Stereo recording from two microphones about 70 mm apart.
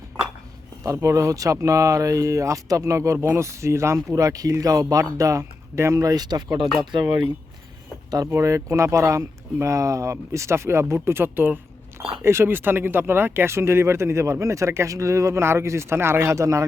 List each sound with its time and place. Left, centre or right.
1.0 s speech: right
8.3 s speech: right
11.9 s speech: right